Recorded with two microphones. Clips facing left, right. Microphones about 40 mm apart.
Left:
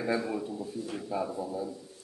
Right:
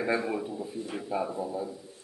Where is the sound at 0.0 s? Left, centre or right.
Centre.